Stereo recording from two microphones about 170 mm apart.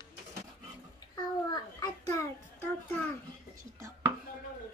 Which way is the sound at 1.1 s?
25° left (ahead or behind).